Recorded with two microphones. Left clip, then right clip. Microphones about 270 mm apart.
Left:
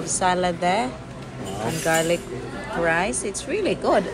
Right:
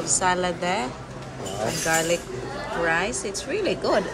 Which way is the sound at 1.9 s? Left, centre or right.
Centre.